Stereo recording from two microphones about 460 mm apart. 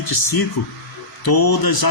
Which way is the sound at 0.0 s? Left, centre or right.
Left.